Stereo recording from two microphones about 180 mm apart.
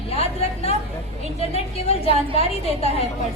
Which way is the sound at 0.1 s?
35° left (ahead or behind).